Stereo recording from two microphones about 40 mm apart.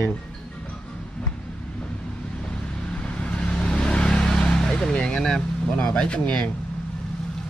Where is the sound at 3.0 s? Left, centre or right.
Left.